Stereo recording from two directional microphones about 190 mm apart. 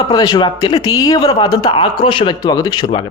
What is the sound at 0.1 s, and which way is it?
Speech, 20° left (ahead or behind).